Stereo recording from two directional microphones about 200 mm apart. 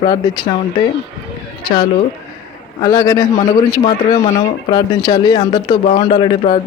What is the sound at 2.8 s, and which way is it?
Speech, 20° left (ahead or behind).